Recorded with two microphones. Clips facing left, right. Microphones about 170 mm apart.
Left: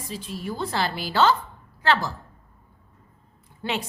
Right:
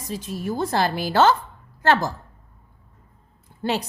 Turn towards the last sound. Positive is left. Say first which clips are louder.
# right 4 dB
turn(degrees=-40)  # may be behind; listen again after turning